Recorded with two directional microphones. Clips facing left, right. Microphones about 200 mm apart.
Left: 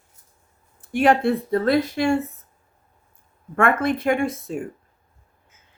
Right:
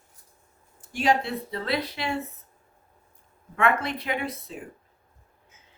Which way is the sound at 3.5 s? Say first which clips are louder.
Left 5 dB; 50° left (ahead or behind).